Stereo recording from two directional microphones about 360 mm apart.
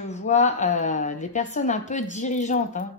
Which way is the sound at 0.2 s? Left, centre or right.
Centre.